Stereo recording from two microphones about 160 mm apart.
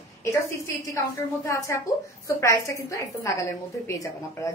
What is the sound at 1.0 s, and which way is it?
A woman's voice, 20° left (ahead or behind).